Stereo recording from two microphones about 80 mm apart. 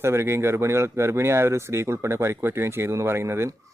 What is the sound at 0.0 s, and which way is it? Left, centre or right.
Speech, right.